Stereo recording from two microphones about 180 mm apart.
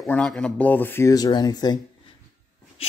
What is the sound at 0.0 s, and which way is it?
Speech, 5° left (ahead or behind).